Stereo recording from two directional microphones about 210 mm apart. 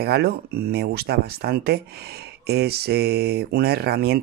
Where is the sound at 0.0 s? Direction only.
50° right (ahead or behind).